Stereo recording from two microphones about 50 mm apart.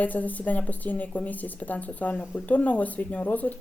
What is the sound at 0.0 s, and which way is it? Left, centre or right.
Speech, left.